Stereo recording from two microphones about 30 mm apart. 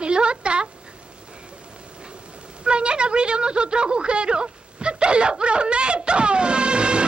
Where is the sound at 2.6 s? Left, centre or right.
Right.